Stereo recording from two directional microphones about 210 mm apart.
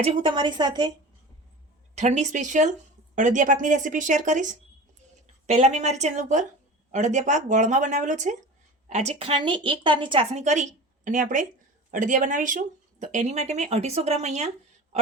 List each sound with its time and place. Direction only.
0.0 s a woman's voice: 25° right (ahead or behind)
2.0 s speech: 35° right (ahead or behind)